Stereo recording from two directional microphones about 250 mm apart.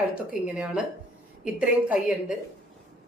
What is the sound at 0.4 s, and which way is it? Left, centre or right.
A woman's voice, centre.